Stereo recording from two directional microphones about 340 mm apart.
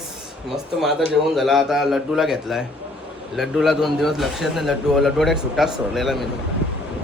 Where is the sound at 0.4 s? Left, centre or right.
Centre.